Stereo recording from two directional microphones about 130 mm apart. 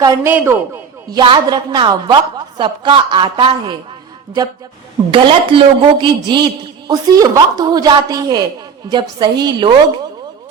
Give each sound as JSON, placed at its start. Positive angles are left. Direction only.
{"t": 0.0, "sound": "a man's voice", "side_deg": -30}
{"t": 0.3, "sound": "a man's voice", "side_deg": -15}
{"t": 1.1, "sound": "a woman's voice", "side_deg": -35}
{"t": 5.1, "sound": "a woman's voice", "side_deg": -40}